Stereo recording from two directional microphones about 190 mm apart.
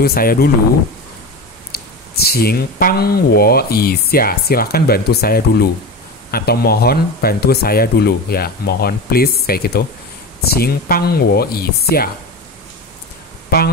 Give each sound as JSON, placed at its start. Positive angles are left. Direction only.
{"t": 0.0, "sound": "speech", "side_deg": 50}
{"t": 1.7, "sound": "speech", "side_deg": 55}
{"t": 13.5, "sound": "speech", "side_deg": 55}